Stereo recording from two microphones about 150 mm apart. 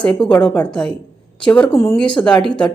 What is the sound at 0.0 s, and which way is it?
A woman's voice, 5° left (ahead or behind).